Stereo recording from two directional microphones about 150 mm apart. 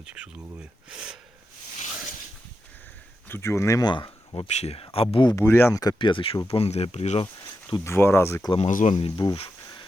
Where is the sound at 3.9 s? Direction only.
35° left (ahead or behind).